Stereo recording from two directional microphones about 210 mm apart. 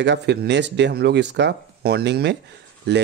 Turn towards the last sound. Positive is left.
turn(degrees=-55)  # may be behind; listen again after turning